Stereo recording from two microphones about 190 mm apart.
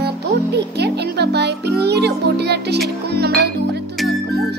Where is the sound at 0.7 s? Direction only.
60° right (ahead or behind).